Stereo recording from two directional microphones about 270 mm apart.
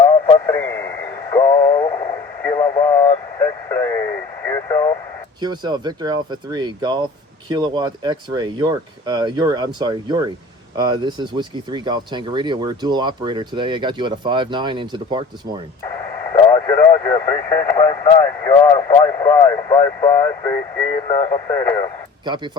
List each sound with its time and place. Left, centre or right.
0.3 s radio: centre
5.4 s speech: centre
15.8 s speech: centre